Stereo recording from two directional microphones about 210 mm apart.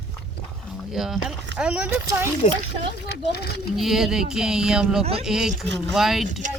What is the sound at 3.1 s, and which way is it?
Speech, 50° left (ahead or behind).